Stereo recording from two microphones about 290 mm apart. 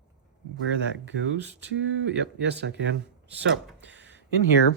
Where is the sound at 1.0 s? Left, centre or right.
Right.